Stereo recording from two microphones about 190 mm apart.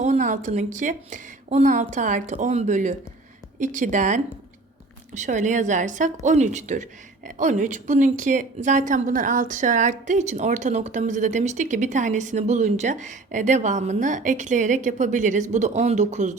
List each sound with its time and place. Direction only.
0.0 s a woman's voice: 40° right (ahead or behind)